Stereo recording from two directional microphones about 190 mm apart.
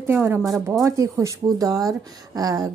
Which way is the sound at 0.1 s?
10° right (ahead or behind).